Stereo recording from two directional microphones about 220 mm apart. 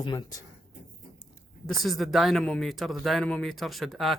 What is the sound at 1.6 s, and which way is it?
Speech, centre (ahead or behind).